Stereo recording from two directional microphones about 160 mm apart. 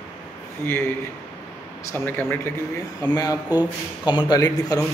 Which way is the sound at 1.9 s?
15° left (ahead or behind).